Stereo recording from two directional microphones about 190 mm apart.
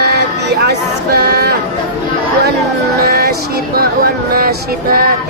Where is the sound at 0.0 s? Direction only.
60° right (ahead or behind).